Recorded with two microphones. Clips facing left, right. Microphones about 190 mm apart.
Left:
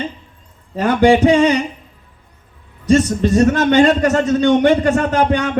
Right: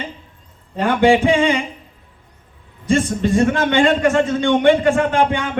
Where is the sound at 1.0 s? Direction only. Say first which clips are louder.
Left 3 dB; 40° left (ahead or behind).